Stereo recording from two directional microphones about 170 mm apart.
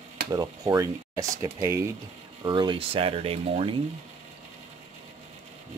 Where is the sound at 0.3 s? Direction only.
20° right (ahead or behind).